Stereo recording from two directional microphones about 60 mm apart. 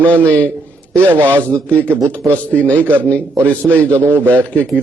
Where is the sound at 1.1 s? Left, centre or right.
Right.